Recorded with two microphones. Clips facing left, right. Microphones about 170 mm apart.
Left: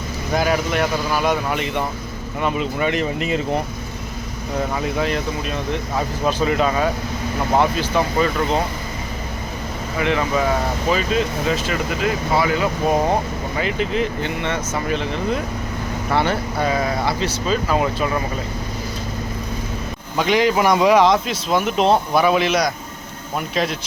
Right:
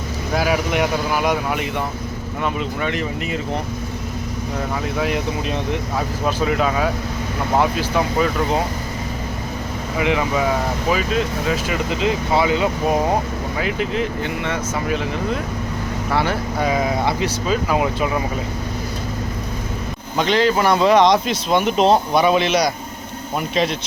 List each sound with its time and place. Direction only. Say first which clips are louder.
0.3 s speech: even; 5° right (ahead or behind)
4.9 s speech: even; 10° right (ahead or behind)
10.0 s speech: even; 15° right (ahead or behind)
11.9 s speech: right 2 dB; 20° right (ahead or behind)
13.6 s speech: left 1 dB; 5° right (ahead or behind)
20.1 s speech: even; 10° left (ahead or behind)